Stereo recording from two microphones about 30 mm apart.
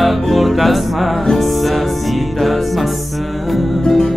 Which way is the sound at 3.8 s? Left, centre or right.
Centre.